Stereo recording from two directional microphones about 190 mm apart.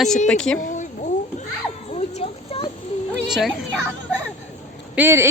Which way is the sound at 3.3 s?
Centre (ahead or behind).